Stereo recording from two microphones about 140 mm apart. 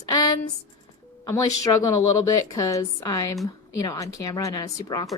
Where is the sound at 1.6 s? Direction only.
25° left (ahead or behind).